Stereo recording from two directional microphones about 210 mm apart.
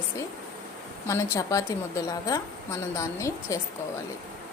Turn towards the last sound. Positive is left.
turn(degrees=15)  # may be behind; listen again after turning